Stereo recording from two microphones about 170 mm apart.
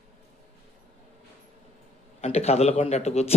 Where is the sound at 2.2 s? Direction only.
40° left (ahead or behind).